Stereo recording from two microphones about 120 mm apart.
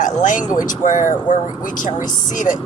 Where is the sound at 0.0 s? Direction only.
90° left.